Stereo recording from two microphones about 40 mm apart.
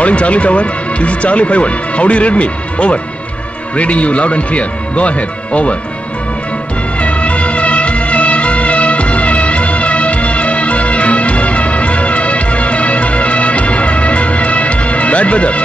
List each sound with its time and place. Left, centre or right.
0.0 s speech: left
7.0 s music: left